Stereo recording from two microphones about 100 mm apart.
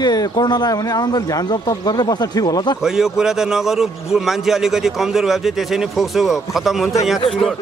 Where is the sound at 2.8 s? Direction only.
5° right (ahead or behind).